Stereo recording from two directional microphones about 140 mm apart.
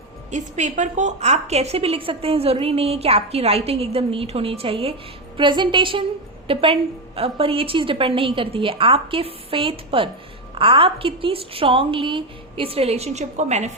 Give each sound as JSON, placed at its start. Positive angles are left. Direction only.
{"t": 0.3, "sound": "a woman's voice", "side_deg": -60}